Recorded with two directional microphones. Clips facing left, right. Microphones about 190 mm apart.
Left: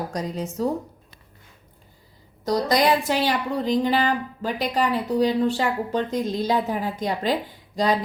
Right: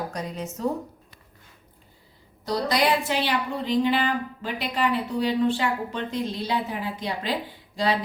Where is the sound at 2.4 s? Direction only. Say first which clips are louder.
Left 3 dB; 45° left (ahead or behind).